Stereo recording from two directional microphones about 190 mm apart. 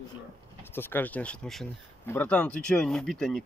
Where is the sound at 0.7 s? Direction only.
10° left (ahead or behind).